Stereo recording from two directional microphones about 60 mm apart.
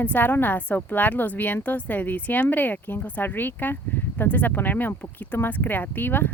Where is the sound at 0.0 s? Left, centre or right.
Left.